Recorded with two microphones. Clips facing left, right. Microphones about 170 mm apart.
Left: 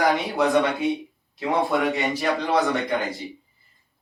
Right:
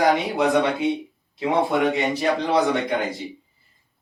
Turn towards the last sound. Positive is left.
turn(degrees=-20)  # may be behind; listen again after turning